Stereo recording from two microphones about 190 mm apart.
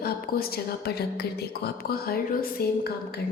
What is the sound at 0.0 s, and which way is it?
A woman's voice, 55° left (ahead or behind).